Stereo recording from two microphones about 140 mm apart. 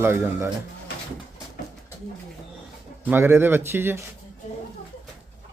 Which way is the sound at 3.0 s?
15° right (ahead or behind).